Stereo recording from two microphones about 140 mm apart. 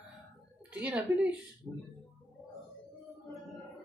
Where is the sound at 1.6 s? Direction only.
15° left (ahead or behind).